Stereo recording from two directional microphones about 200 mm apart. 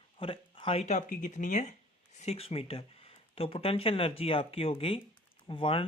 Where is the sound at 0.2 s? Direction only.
25° left (ahead or behind).